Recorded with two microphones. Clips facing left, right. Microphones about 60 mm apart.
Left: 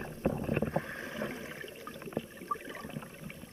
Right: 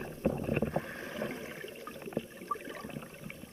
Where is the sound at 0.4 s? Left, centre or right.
Centre.